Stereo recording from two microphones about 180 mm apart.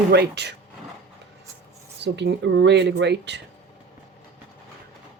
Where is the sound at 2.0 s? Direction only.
75° right (ahead or behind).